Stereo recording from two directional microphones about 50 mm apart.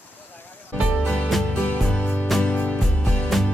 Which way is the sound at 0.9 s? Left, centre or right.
Centre.